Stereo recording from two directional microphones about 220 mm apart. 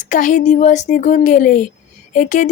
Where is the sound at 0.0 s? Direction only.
35° left (ahead or behind).